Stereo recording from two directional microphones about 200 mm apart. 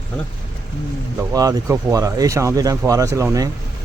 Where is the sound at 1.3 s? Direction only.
15° right (ahead or behind).